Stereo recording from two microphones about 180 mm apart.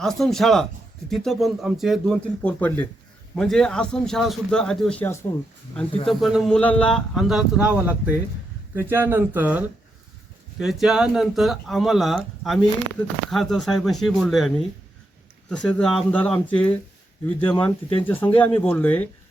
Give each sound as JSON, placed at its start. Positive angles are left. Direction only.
{"t": 0.0, "sound": "speech", "side_deg": 0}
{"t": 6.1, "sound": "speech", "side_deg": 0}
{"t": 17.9, "sound": "speech", "side_deg": 10}